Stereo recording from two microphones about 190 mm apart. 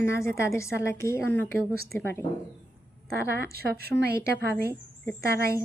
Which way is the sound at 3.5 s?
55° right (ahead or behind).